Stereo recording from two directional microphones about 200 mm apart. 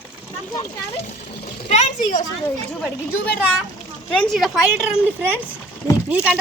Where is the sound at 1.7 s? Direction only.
35° left (ahead or behind).